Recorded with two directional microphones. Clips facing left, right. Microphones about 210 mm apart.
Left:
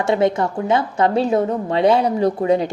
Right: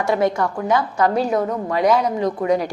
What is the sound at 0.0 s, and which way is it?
A woman's voice, 25° left (ahead or behind).